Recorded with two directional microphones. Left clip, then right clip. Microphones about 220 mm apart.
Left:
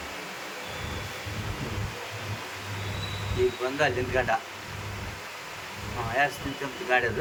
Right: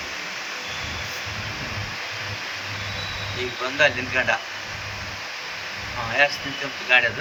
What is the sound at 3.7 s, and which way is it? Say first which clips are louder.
Speech: right 6 dB; 20° left (ahead or behind).